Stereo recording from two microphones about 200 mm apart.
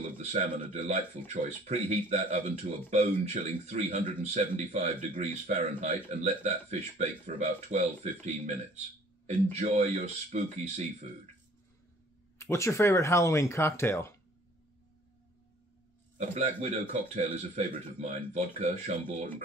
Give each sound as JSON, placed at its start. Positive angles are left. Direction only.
{"t": 0.0, "sound": "speech", "side_deg": -35}
{"t": 12.4, "sound": "speech", "side_deg": 15}
{"t": 16.2, "sound": "speech", "side_deg": -35}